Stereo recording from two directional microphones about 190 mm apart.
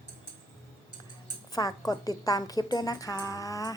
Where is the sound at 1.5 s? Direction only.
20° left (ahead or behind).